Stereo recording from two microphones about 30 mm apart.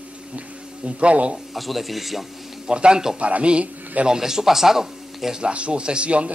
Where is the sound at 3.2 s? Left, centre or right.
Right.